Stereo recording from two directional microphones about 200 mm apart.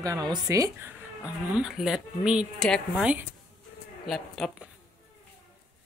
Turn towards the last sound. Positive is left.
turn(degrees=0)  # may be behind; listen again after turning